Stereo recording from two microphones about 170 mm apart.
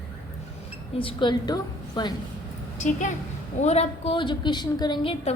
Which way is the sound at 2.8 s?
45° left (ahead or behind).